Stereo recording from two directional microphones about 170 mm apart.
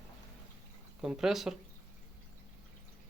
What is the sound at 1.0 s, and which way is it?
Speech, 5° right (ahead or behind).